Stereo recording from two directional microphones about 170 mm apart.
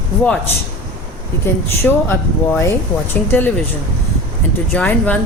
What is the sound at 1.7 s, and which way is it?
A woman's voice, 10° left (ahead or behind).